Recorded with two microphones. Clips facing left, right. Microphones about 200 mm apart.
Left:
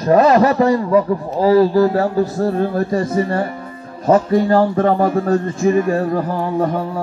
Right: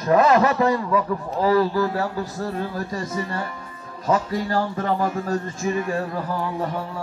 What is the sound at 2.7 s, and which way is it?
A man's voice, 60° left (ahead or behind).